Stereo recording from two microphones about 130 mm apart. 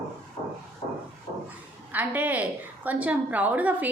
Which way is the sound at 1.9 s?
15° right (ahead or behind).